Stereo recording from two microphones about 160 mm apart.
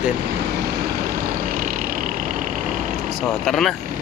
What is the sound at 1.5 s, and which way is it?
Vehicle, 60° right (ahead or behind).